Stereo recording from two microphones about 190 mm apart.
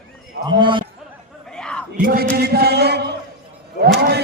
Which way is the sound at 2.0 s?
50° right (ahead or behind).